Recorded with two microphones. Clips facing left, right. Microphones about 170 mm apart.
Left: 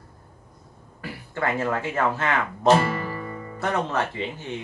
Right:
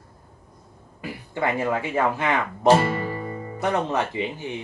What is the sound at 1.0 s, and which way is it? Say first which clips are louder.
Speech: right 2 dB; 15° right (ahead or behind).